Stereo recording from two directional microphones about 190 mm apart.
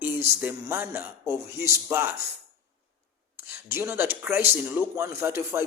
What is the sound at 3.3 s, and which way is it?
Speech, 10° right (ahead or behind).